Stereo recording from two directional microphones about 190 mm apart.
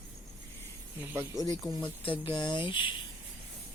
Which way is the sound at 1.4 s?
20° left (ahead or behind).